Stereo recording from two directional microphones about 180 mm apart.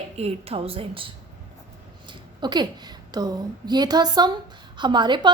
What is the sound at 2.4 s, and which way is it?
A woman's voice, 25° right (ahead or behind).